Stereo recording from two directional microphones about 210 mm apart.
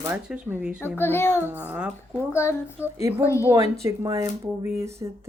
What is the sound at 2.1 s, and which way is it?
Speech, 10° left (ahead or behind).